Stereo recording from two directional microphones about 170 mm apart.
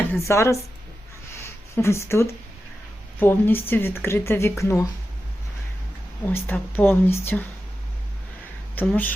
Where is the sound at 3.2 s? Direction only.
10° left (ahead or behind).